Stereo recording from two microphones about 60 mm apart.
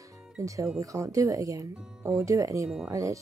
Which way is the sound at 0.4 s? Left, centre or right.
Right.